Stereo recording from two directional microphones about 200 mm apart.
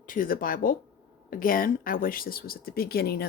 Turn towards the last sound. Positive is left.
turn(degrees=50)  # may be behind; listen again after turning